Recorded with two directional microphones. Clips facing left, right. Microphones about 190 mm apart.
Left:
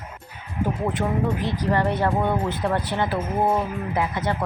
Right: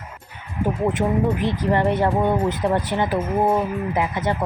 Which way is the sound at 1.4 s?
20° right (ahead or behind).